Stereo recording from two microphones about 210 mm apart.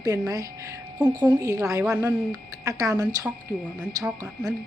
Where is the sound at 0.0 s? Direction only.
15° right (ahead or behind).